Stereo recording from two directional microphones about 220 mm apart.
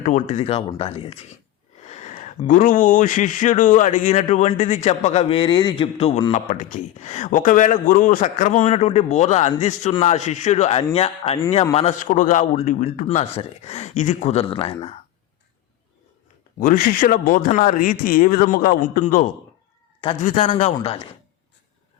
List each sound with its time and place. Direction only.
0.0 s speech: 35° left (ahead or behind)
16.6 s speech: 40° left (ahead or behind)
20.0 s speech: 25° left (ahead or behind)